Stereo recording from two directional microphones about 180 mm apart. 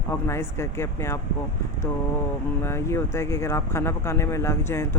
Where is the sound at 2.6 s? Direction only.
15° left (ahead or behind).